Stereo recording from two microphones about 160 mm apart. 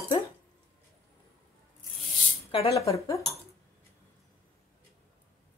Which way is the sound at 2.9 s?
20° left (ahead or behind).